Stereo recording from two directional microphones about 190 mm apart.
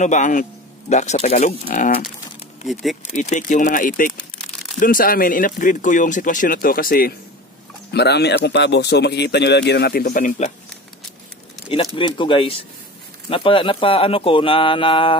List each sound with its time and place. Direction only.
0.0 s speech: 40° left (ahead or behind)
2.7 s speech: centre (ahead or behind)
3.0 s speech: 40° left (ahead or behind)
7.9 s speech: 60° left (ahead or behind)
11.7 s speech: 25° left (ahead or behind)